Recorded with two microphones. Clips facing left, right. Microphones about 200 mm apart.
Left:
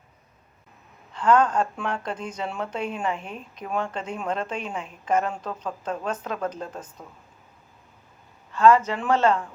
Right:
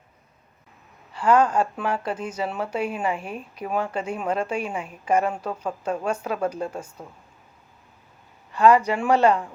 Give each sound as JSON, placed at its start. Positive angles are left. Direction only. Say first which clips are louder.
{"t": 1.1, "sound": "speech", "louder": "right 1 dB", "side_deg": -10}
{"t": 8.5, "sound": "speech", "louder": "right 1 dB", "side_deg": -15}